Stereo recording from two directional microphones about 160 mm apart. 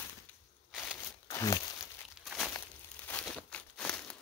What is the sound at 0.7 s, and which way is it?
Crushing, centre (ahead or behind).